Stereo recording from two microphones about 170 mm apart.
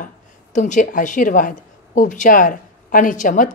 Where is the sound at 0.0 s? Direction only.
50° left (ahead or behind).